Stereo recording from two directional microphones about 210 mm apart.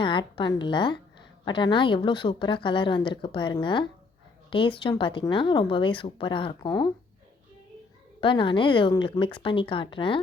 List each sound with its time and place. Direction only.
0.0 s a woman's voice: 25° left (ahead or behind)
8.2 s speech: 25° left (ahead or behind)